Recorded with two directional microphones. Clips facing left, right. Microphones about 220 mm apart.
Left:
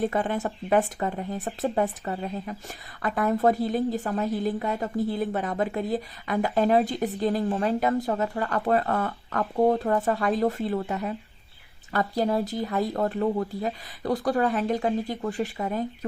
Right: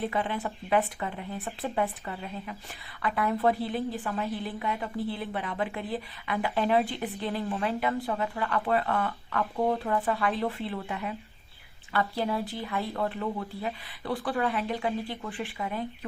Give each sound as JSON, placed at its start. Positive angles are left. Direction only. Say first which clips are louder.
{"t": 0.0, "sound": "a woman's voice", "louder": "left 5 dB", "side_deg": 45}